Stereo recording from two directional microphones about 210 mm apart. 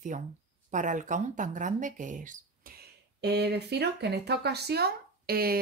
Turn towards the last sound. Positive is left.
turn(degrees=-45)  # may be behind; listen again after turning